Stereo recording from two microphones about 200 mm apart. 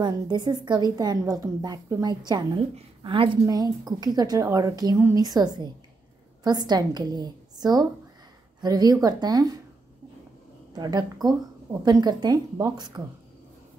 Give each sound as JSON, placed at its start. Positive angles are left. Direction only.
{"t": 0.0, "sound": "a woman's voice", "side_deg": -20}
{"t": 10.7, "sound": "a woman's voice", "side_deg": -20}